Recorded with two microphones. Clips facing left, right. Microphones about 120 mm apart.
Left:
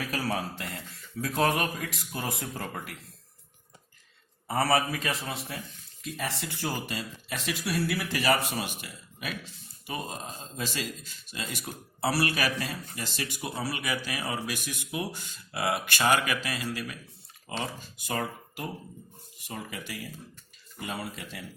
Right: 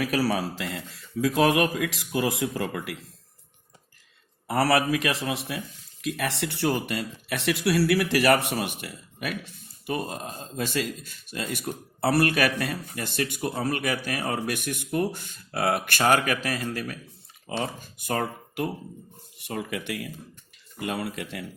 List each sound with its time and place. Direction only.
0.0 s speech: 85° right
4.4 s a man's voice: 85° right; by 21.4 s 65° right (ahead or behind)